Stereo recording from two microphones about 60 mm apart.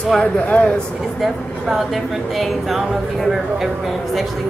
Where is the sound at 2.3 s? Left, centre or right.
Centre.